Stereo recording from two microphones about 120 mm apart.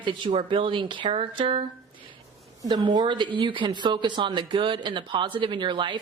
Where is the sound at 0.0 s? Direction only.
45° right (ahead or behind).